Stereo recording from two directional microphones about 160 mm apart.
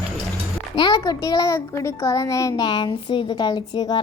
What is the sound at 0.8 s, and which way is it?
A woman's voice, 25° left (ahead or behind).